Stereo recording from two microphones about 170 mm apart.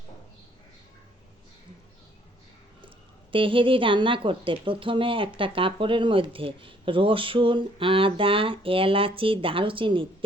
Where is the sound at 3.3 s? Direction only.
30° right (ahead or behind).